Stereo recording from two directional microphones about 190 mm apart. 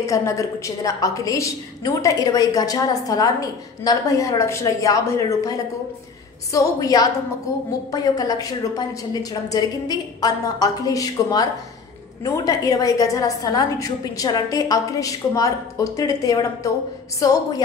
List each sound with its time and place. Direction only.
0.0 s a woman's voice: 15° left (ahead or behind)
6.5 s a woman's voice: 20° left (ahead or behind)